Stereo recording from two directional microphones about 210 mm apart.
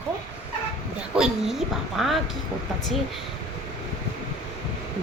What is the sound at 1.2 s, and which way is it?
A woman's voice, centre (ahead or behind).